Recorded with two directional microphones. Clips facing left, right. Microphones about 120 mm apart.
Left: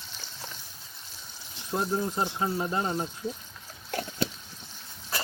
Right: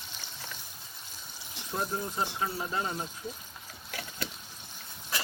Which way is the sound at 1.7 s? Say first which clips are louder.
Left 5 dB; 25° left (ahead or behind).